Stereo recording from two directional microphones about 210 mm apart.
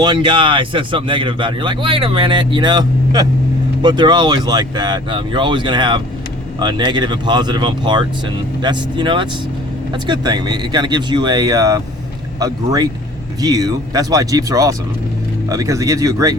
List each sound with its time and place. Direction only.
0.0 s speech: 20° right (ahead or behind)